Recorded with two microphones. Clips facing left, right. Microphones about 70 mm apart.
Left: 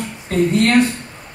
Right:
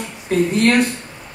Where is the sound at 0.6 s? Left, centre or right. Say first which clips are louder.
Left 1 dB; centre.